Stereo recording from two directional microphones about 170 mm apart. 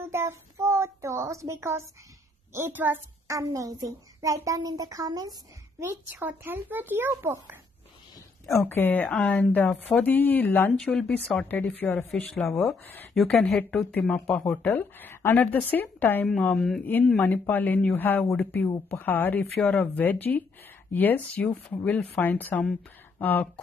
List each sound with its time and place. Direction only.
0.0 s a woman's voice: 15° right (ahead or behind)
8.5 s a woman's voice: 10° left (ahead or behind)
12.8 s speech: 10° left (ahead or behind)
13.1 s a woman's voice: centre (ahead or behind)